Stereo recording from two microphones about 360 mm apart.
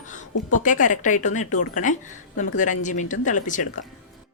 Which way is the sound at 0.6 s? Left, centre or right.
Left.